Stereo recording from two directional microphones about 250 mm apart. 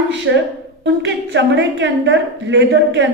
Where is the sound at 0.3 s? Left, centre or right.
Right.